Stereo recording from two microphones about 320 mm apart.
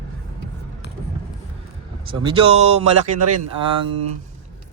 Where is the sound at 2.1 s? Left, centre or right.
Centre.